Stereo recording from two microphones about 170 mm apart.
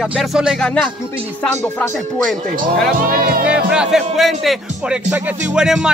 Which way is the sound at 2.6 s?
55° right (ahead or behind).